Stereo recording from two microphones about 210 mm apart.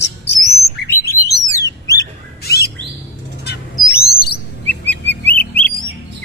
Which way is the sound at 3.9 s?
50° left (ahead or behind).